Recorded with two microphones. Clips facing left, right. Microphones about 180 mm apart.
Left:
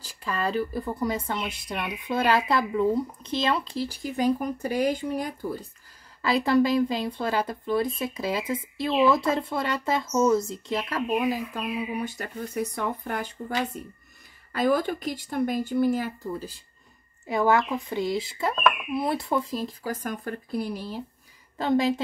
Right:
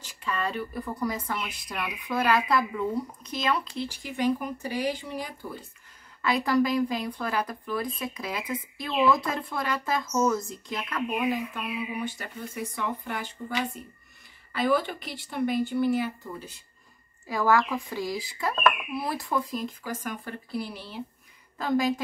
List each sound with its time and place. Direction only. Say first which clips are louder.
0.0 s speech: left 2 dB; 35° left (ahead or behind)
6.2 s speech: left 3 dB; 25° left (ahead or behind)
17.3 s speech: left 2 dB; 20° left (ahead or behind); by 21.0 s 45° left (ahead or behind)
21.5 s speech: left 2 dB; 25° left (ahead or behind)